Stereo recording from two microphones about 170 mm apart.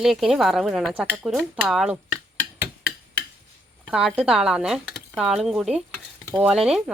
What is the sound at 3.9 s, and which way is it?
Cutlery, 5° right (ahead or behind).